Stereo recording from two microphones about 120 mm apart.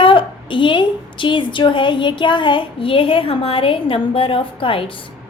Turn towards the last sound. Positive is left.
turn(degrees=45)  # may be behind; listen again after turning